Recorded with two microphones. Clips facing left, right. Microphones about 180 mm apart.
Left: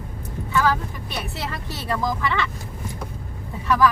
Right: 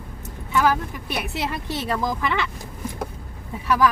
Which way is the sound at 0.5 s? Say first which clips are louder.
Right 1 dB; 15° right (ahead or behind).